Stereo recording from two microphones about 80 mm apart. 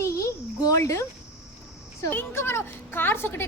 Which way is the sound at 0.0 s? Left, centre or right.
Left.